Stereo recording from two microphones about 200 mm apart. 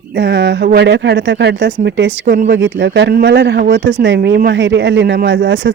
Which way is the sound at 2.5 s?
65° right (ahead or behind).